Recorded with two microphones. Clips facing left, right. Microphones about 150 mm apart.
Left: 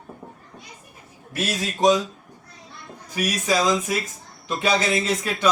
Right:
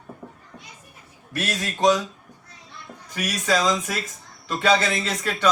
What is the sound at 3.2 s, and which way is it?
A man's voice, 10° left (ahead or behind).